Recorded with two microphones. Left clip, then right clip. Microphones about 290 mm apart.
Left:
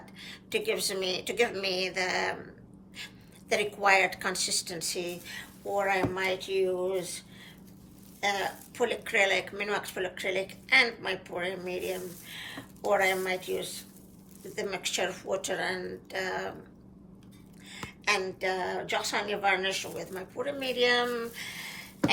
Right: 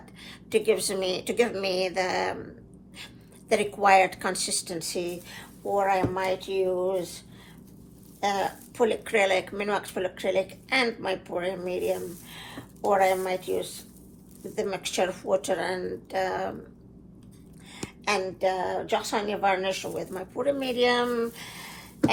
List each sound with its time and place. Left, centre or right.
0.2 s a woman's voice: centre
3.5 s a woman's voice: centre
8.2 s a woman's voice: centre
17.7 s a woman's voice: centre